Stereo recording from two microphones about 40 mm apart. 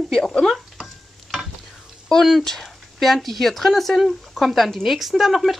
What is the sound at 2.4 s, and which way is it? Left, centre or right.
Speech, centre.